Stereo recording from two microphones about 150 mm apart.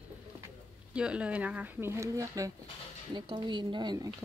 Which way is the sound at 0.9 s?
5° right (ahead or behind).